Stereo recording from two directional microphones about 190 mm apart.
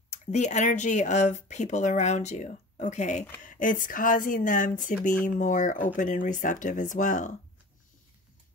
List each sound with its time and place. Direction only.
0.3 s speech: 40° left (ahead or behind)